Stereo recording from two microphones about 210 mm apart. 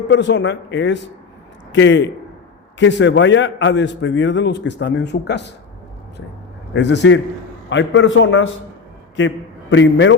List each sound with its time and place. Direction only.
0.1 s a man's voice: 60° left (ahead or behind)
6.7 s a man's voice: 55° left (ahead or behind)